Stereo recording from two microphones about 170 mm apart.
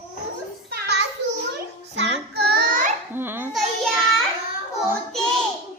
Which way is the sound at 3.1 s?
10° right (ahead or behind).